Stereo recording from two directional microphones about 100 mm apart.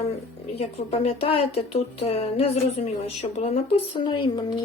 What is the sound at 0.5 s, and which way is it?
A woman's voice, 80° left.